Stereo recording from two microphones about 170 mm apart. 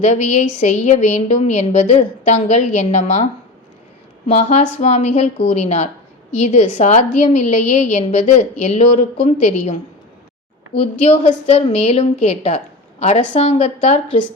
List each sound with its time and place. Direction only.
0.0 s a woman's voice: 45° left (ahead or behind)
4.3 s a woman's voice: 40° left (ahead or behind)
10.8 s a woman's voice: 40° left (ahead or behind)